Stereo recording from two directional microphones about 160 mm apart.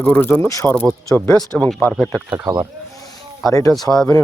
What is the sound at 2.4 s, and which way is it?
Speech, 20° right (ahead or behind).